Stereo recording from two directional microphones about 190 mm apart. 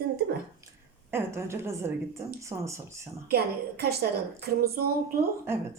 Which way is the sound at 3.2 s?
55° right (ahead or behind).